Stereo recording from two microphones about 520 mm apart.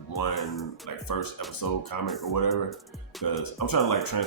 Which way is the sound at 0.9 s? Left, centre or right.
Left.